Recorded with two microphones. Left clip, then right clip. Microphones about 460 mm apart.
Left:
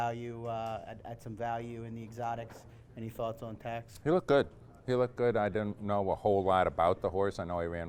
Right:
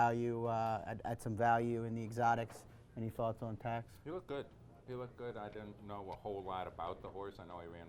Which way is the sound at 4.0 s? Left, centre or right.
Left.